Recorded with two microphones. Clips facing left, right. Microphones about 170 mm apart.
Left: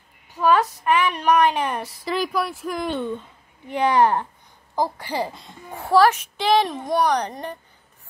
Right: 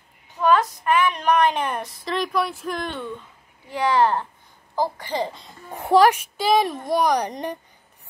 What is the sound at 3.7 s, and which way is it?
Speech, 20° left (ahead or behind).